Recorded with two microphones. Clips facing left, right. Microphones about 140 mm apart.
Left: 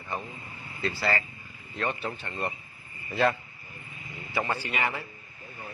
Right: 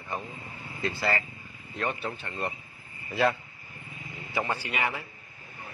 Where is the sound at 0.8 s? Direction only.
20° right (ahead or behind).